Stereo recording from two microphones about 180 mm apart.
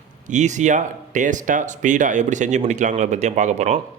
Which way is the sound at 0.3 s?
40° right (ahead or behind).